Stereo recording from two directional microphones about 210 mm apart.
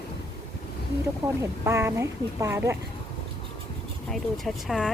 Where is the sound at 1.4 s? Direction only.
10° right (ahead or behind).